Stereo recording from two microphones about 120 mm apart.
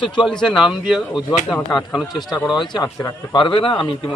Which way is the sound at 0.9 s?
Centre (ahead or behind).